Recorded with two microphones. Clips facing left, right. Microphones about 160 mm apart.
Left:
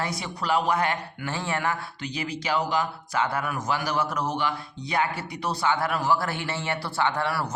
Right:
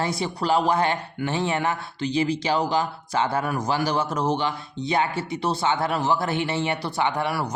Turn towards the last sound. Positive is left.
turn(degrees=-15)  # may be behind; listen again after turning